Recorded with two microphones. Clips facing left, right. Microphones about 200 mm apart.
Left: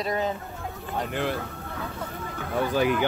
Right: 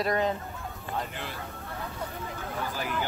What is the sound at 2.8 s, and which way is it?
Speech, 80° left.